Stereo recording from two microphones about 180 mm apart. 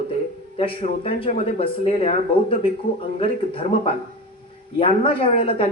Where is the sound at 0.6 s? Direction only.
30° left (ahead or behind).